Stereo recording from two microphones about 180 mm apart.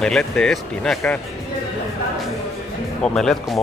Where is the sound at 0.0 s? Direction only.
5° left (ahead or behind).